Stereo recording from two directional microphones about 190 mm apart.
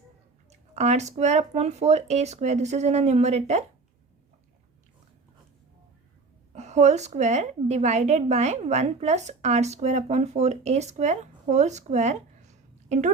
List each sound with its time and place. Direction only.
0.5 s a woman's voice: 35° right (ahead or behind)
6.5 s a woman's voice: 35° right (ahead or behind)